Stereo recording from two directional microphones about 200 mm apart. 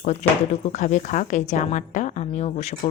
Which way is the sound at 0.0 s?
35° left (ahead or behind).